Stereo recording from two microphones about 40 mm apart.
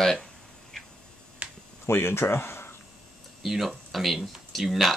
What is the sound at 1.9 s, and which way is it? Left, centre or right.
Speech, left.